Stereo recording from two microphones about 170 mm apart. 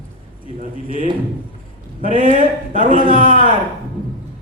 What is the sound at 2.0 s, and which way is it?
A man's voice, 55° right (ahead or behind).